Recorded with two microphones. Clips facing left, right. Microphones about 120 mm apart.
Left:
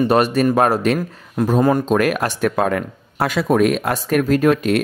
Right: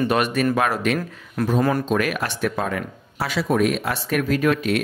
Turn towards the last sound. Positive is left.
turn(degrees=40)  # may be behind; listen again after turning